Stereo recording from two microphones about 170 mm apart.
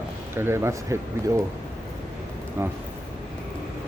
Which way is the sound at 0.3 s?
15° right (ahead or behind).